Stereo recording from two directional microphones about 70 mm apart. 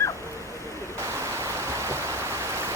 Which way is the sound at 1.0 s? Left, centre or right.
Right.